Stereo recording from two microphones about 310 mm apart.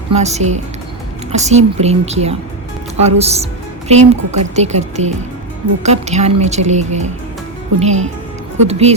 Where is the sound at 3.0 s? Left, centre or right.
Centre.